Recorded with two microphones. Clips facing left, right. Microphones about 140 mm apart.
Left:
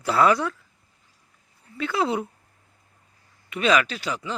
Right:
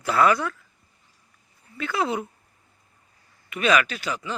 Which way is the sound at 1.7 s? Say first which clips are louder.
Left 1 dB; 25° left (ahead or behind).